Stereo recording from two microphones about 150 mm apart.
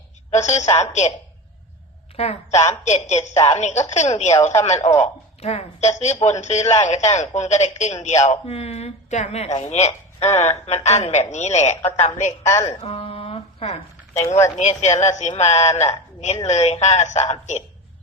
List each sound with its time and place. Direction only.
0.3 s speech: 50° left (ahead or behind)
2.1 s a woman's voice: 45° left (ahead or behind)
12.6 s speech: 40° left (ahead or behind)